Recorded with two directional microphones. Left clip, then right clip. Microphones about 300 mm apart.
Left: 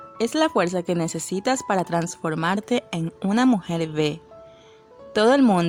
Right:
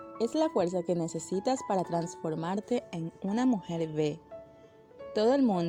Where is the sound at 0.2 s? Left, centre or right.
Centre.